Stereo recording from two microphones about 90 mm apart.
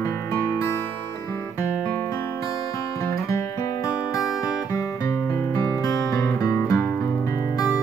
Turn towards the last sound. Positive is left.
turn(degrees=30)  # may be behind; listen again after turning